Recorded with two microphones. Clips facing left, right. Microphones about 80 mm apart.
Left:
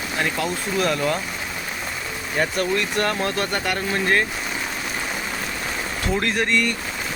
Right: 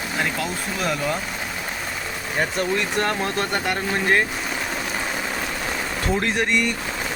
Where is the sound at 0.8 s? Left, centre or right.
Centre.